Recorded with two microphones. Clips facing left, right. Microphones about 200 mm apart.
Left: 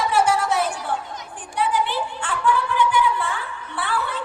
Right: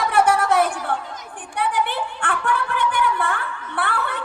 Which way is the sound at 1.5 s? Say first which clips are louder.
Even; 55° right (ahead or behind).